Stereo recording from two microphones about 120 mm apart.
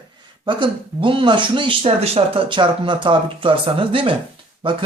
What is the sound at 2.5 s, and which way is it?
Speech, 40° right (ahead or behind).